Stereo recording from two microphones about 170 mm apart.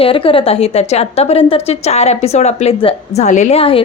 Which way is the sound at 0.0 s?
30° left (ahead or behind).